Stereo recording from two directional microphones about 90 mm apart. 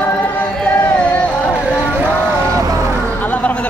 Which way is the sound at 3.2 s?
15° left (ahead or behind).